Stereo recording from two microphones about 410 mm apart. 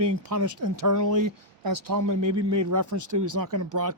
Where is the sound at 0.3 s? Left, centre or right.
Right.